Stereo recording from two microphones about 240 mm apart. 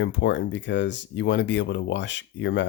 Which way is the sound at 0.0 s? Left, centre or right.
Left.